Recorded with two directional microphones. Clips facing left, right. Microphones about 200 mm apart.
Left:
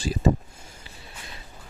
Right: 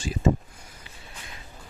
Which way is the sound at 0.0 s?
35° left (ahead or behind).